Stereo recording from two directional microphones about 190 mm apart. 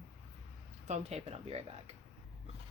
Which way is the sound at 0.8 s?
35° right (ahead or behind).